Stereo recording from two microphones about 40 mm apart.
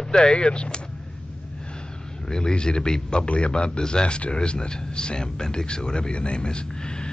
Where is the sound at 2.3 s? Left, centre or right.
Left.